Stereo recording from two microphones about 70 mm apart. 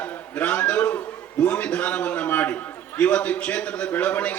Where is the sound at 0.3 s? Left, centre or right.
Left.